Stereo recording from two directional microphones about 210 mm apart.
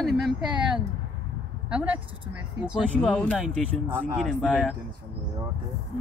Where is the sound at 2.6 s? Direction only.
5° right (ahead or behind).